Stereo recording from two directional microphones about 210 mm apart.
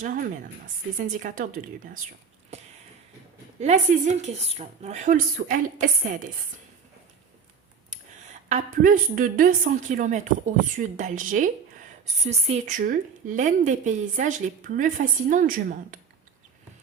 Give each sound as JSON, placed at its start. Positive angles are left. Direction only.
{"t": 0.0, "sound": "a woman's voice", "side_deg": -40}
{"t": 2.5, "sound": "a sound", "side_deg": -30}
{"t": 3.6, "sound": "a woman's voice", "side_deg": -35}
{"t": 8.4, "sound": "a woman's voice", "side_deg": -35}